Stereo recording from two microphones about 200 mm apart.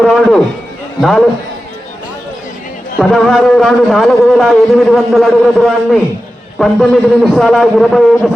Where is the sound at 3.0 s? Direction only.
Centre (ahead or behind).